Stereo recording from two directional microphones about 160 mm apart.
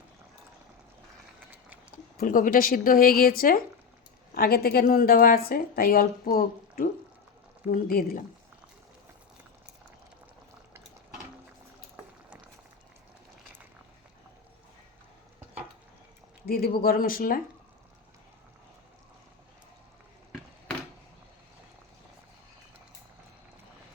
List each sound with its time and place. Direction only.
2.1 s speech: 60° left (ahead or behind)
16.5 s speech: 65° left (ahead or behind)